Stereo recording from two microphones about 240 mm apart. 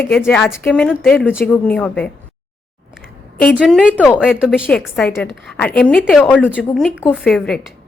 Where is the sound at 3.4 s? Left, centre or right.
Centre.